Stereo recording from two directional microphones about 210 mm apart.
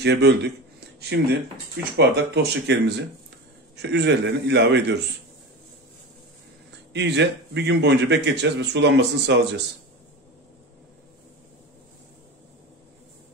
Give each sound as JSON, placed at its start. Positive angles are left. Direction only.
{"t": 0.0, "sound": "a man's voice", "side_deg": -50}
{"t": 6.9, "sound": "a man's voice", "side_deg": -55}